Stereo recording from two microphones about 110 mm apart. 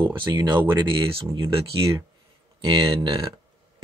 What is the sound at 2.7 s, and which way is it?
Speech, 50° right (ahead or behind).